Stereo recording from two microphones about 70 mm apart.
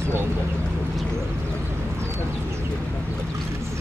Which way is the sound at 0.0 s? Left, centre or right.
Right.